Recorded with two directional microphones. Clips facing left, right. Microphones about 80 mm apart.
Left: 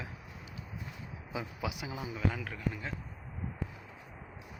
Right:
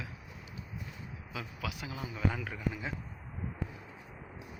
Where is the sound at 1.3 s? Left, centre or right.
Centre.